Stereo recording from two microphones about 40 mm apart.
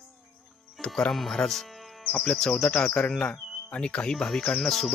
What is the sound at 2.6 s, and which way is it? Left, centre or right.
Speech, left.